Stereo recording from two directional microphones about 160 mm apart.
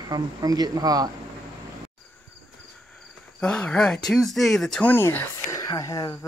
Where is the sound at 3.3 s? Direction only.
5° left (ahead or behind).